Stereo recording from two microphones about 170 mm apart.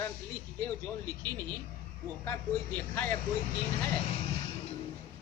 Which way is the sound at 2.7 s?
10° left (ahead or behind).